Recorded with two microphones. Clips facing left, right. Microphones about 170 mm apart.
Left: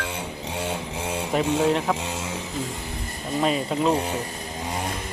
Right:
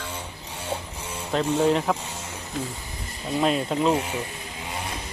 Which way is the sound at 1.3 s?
Centre (ahead or behind).